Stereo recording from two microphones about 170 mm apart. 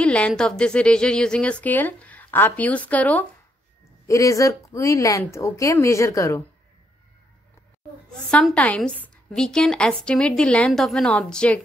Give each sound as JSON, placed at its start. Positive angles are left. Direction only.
{"t": 0.0, "sound": "a woman's voice", "side_deg": 5}
{"t": 8.1, "sound": "a woman's voice", "side_deg": 5}